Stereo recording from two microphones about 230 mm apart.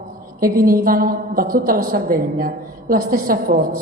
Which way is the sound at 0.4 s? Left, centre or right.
Right.